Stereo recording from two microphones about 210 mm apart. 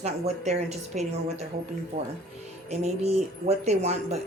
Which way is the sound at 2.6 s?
30° right (ahead or behind).